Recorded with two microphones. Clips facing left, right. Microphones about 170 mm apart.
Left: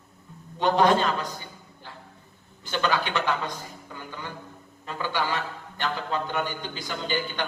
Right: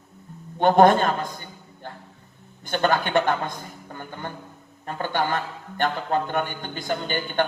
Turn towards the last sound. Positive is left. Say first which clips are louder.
# right 3 dB
turn(degrees=-50)  # may be behind; listen again after turning